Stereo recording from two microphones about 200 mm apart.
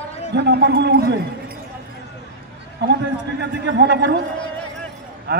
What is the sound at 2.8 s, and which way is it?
A man's voice, 55° right (ahead or behind).